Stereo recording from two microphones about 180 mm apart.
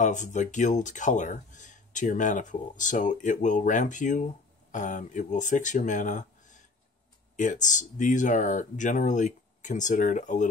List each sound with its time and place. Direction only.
0.0 s speech: 40° left (ahead or behind)